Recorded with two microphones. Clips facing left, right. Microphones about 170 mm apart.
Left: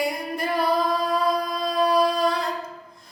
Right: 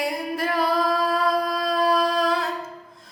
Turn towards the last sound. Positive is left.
turn(degrees=0)  # may be behind; listen again after turning